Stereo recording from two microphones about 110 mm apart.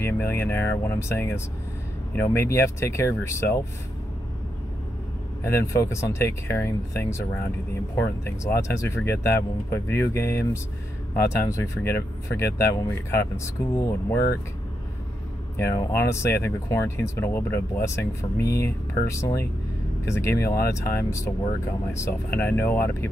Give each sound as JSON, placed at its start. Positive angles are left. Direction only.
{"t": 0.0, "sound": "speech", "side_deg": 20}
{"t": 5.4, "sound": "speech", "side_deg": 25}
{"t": 15.5, "sound": "speech", "side_deg": 25}